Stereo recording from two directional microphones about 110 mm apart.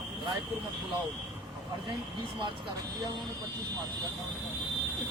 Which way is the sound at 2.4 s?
40° right (ahead or behind).